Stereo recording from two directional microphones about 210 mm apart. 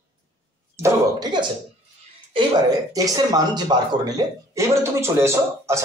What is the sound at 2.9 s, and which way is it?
Speech, 15° right (ahead or behind).